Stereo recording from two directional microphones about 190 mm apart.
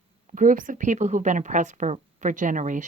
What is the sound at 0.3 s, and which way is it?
Speech, 45° right (ahead or behind).